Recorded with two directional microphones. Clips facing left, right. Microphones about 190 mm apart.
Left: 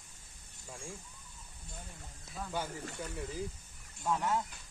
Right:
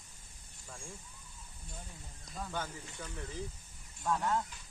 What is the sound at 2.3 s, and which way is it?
Speech, 10° left (ahead or behind).